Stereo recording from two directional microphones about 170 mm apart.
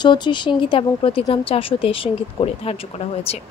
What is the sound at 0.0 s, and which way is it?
A woman's voice, 25° left (ahead or behind).